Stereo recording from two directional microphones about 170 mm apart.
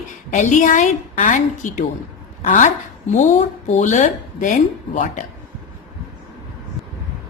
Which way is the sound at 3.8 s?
45° left (ahead or behind).